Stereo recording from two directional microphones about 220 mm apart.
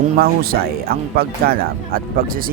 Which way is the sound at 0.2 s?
45° right (ahead or behind).